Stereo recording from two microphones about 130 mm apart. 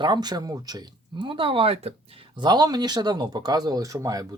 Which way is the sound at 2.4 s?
30° right (ahead or behind).